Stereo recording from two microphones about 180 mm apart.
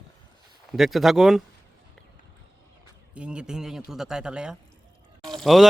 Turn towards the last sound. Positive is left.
turn(degrees=0)  # may be behind; listen again after turning